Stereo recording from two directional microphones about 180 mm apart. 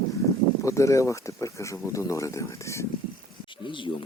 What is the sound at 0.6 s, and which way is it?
Speech, 15° left (ahead or behind).